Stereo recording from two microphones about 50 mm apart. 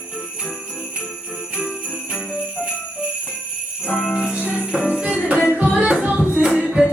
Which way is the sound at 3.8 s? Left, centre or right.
Left.